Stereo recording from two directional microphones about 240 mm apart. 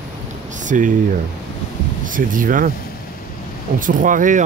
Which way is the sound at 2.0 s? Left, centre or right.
Right.